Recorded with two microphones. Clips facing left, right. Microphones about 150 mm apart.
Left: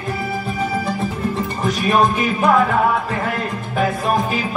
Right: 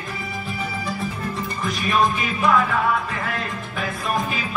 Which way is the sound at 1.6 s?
40° left (ahead or behind).